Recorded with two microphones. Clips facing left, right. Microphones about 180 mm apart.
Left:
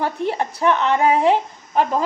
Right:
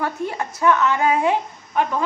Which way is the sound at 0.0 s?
30° left (ahead or behind).